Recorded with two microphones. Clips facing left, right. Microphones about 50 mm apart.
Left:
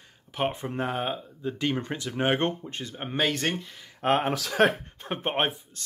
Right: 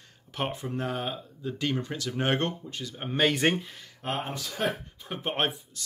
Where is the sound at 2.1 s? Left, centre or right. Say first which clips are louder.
Left 2 dB; centre.